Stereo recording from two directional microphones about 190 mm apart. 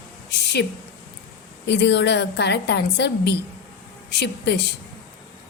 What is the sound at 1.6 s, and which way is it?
A woman's voice, 65° left (ahead or behind).